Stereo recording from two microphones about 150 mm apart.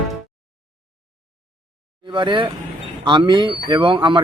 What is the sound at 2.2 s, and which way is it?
Speech, 30° right (ahead or behind).